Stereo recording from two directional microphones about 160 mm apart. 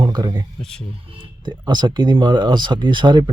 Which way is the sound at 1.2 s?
25° right (ahead or behind).